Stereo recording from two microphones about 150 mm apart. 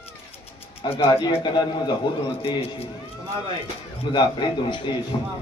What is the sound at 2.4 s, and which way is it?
Speech, 40° left (ahead or behind).